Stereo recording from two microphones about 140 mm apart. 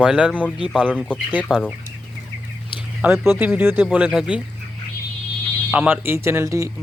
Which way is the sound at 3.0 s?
15° right (ahead or behind).